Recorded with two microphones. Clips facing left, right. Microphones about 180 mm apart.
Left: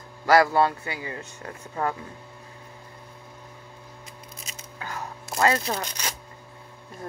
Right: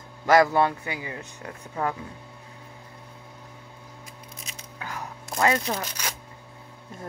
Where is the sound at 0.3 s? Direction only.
20° right (ahead or behind).